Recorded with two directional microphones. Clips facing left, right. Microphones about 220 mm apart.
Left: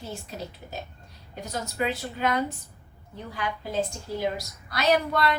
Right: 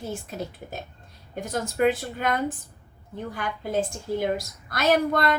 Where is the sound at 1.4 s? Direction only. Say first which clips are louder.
Right 6 dB; 50° right (ahead or behind).